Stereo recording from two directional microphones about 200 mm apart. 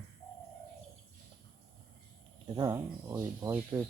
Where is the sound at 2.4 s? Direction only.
20° right (ahead or behind).